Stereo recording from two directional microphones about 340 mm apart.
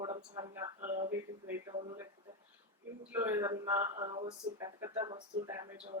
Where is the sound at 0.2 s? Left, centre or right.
Centre.